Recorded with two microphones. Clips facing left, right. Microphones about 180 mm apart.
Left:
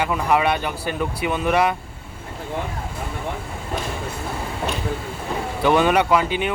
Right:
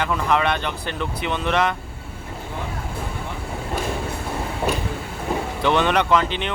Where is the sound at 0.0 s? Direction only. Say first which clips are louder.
Left 1 dB; 10° left (ahead or behind).